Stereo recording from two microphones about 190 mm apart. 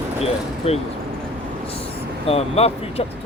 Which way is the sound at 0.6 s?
30° left (ahead or behind).